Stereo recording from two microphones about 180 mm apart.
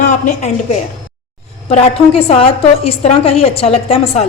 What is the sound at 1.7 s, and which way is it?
A woman's voice, 35° left (ahead or behind).